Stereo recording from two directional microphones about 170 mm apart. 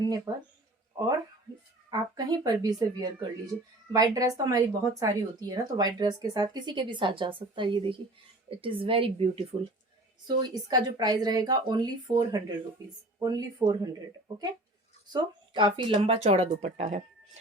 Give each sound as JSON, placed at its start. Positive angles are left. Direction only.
{"t": 0.3, "sound": "speech", "side_deg": -25}
{"t": 1.9, "sound": "speech", "side_deg": -20}
{"t": 15.1, "sound": "speech", "side_deg": -25}